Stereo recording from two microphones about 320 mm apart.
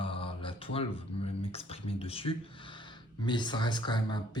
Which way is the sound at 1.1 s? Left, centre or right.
Centre.